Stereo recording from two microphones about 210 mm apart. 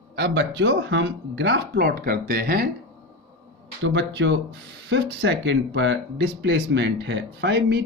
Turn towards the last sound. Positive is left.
turn(degrees=-55)  # may be behind; listen again after turning